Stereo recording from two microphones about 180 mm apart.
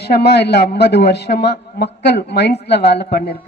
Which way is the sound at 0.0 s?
65° left (ahead or behind).